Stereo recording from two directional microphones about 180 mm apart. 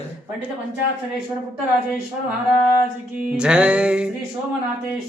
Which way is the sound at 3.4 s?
5° right (ahead or behind).